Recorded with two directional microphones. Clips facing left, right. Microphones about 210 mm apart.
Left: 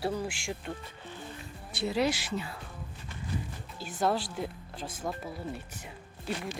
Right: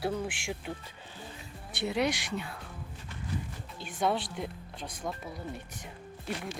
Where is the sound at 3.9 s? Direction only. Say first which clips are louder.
Left 1 dB; centre (ahead or behind).